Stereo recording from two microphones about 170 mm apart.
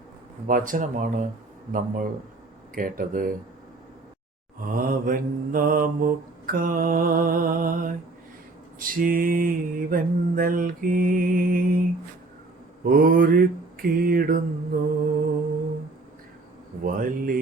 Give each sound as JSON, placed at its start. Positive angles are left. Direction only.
{"t": 0.4, "sound": "speech", "side_deg": -50}
{"t": 2.7, "sound": "mantra", "side_deg": -55}
{"t": 4.7, "sound": "mantra", "side_deg": -55}
{"t": 12.8, "sound": "mantra", "side_deg": -55}
{"t": 16.8, "sound": "mantra", "side_deg": -55}